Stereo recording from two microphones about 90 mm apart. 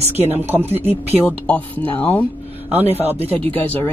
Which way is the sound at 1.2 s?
15° left (ahead or behind).